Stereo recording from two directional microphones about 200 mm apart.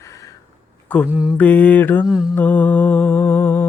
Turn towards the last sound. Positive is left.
turn(degrees=10)  # may be behind; listen again after turning